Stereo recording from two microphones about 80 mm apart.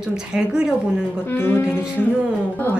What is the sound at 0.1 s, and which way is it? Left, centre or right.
Speech, centre.